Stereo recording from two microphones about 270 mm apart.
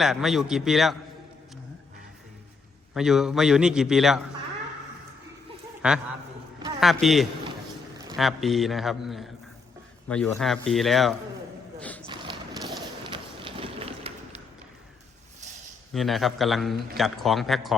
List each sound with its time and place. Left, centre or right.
0.0 s a man's voice: centre
2.9 s a man's voice: centre
5.8 s a man's voice: centre
11.8 s a sound: centre
12.0 s horse: centre
15.9 s a man's voice: centre